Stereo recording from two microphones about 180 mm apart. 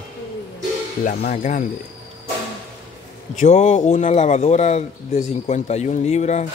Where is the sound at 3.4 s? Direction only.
40° left (ahead or behind).